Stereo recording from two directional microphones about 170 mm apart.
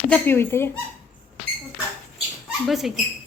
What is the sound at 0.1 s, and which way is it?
Speech, 15° left (ahead or behind).